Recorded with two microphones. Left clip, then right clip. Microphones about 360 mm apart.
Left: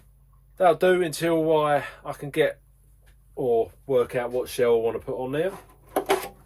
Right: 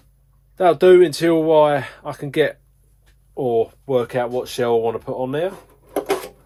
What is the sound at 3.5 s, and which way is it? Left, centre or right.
Speech, centre.